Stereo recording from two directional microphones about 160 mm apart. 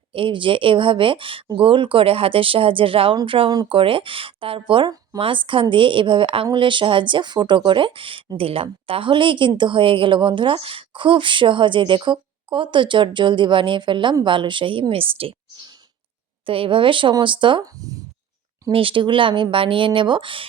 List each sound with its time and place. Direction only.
0.1 s speech: 35° right (ahead or behind)